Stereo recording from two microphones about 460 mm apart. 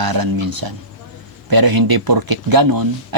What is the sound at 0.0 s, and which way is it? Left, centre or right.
Speech, right.